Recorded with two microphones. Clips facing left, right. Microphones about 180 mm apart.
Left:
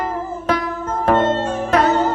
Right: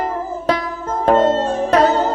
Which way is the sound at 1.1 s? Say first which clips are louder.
Right 3 dB; 40° right (ahead or behind).